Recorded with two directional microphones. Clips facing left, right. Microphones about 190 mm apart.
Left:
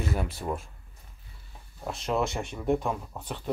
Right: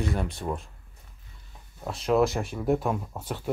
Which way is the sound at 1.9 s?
Centre (ahead or behind).